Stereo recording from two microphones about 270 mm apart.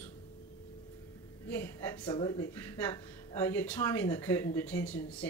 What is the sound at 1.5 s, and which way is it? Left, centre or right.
Speech, centre.